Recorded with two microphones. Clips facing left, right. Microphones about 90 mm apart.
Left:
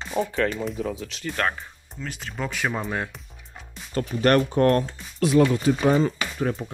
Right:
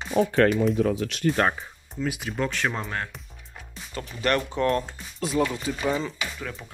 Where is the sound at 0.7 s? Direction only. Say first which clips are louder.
Right 6 dB; 65° right (ahead or behind).